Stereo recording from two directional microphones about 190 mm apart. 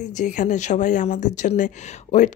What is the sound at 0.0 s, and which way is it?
Speech, 40° left (ahead or behind).